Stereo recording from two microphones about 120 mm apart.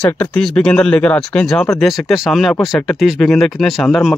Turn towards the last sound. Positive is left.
turn(degrees=0)  # may be behind; listen again after turning